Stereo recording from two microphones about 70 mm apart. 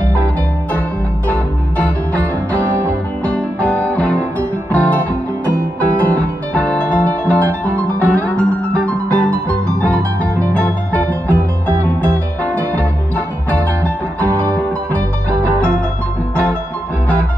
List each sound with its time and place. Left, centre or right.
1.8 s music: left